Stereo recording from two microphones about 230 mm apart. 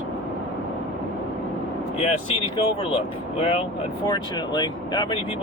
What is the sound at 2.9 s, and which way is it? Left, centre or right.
Speech, left.